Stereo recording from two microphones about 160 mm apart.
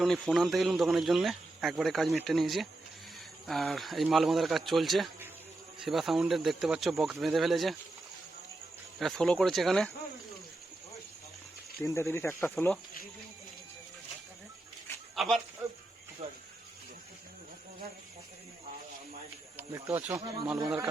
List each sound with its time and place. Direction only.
0.0 s speech: centre (ahead or behind)
9.0 s speech: centre (ahead or behind)
11.8 s speech: 15° left (ahead or behind)
15.1 s a sound: centre (ahead or behind)
16.2 s insect: 40° right (ahead or behind)
19.5 s speech: 10° right (ahead or behind)